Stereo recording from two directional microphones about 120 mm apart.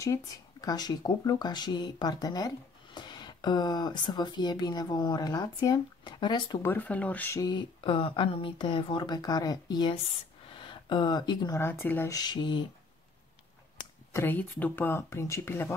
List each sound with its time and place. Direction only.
0.0 s speech: 30° left (ahead or behind)
6.6 s speech: 15° left (ahead or behind)
7.3 s speech: 35° left (ahead or behind)
10.5 s a sound: 45° left (ahead or behind)
11.5 s speech: 20° left (ahead or behind)
12.1 s speech: 35° left (ahead or behind)
14.1 s speech: 15° left (ahead or behind)